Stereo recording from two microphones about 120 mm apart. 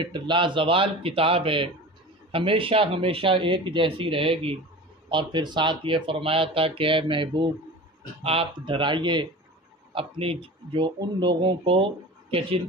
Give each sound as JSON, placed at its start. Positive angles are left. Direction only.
{"t": 0.0, "sound": "speech", "side_deg": -40}
{"t": 5.1, "sound": "speech", "side_deg": -40}